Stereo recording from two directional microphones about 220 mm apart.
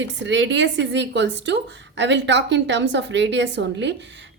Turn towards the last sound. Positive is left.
turn(degrees=-55)  # may be behind; listen again after turning